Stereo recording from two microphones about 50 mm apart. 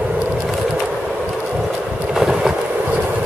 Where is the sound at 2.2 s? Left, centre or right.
Centre.